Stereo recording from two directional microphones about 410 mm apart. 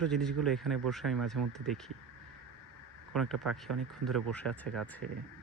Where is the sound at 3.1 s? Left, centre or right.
Centre.